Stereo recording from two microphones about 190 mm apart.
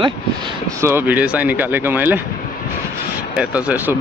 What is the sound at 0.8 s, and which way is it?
Speech, 10° right (ahead or behind).